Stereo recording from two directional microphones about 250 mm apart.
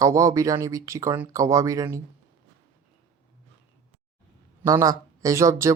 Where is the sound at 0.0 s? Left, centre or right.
Centre.